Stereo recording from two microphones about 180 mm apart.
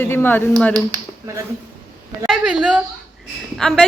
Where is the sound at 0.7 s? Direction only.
15° right (ahead or behind).